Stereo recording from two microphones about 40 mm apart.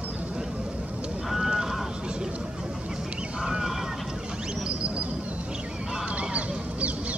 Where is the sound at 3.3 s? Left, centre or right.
Centre.